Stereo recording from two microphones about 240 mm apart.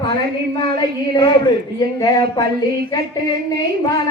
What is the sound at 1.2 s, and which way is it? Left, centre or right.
Speech, centre.